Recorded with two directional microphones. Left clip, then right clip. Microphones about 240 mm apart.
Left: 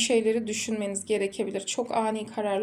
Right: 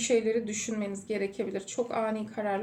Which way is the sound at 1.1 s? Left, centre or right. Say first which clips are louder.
Left 4 dB; left.